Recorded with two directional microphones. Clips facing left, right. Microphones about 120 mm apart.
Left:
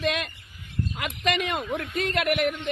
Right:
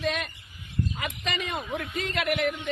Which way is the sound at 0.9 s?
75° left (ahead or behind).